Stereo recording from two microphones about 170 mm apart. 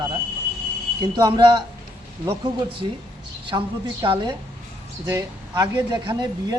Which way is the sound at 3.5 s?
20° right (ahead or behind).